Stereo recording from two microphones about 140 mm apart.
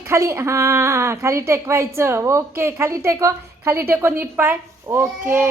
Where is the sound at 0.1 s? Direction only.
20° right (ahead or behind).